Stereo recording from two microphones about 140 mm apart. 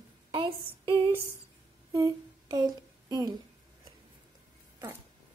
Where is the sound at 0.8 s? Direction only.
20° left (ahead or behind).